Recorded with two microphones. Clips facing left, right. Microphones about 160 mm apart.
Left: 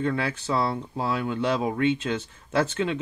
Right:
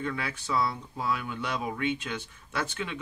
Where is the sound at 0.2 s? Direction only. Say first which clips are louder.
Left 4 dB; 30° left (ahead or behind).